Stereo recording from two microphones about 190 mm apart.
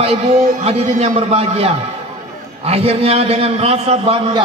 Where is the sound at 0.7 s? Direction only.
30° right (ahead or behind).